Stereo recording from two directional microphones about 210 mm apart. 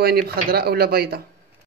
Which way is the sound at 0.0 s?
50° right (ahead or behind).